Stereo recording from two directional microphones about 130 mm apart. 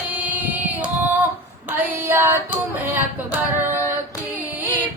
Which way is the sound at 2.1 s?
15° right (ahead or behind).